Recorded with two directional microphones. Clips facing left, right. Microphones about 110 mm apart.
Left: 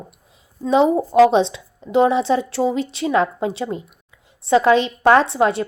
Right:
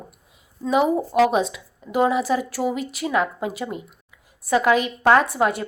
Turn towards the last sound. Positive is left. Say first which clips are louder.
# left 3 dB
turn(degrees=25)  # may be behind; listen again after turning